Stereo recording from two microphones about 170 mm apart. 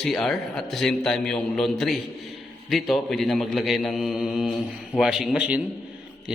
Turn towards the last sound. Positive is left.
turn(degrees=-5)  # may be behind; listen again after turning